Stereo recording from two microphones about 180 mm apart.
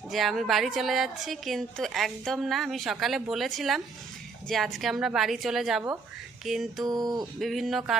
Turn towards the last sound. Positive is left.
turn(degrees=0)  # may be behind; listen again after turning